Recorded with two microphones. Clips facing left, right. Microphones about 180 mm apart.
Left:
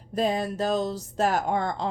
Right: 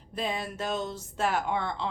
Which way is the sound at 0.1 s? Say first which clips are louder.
Left 7 dB; 40° left (ahead or behind).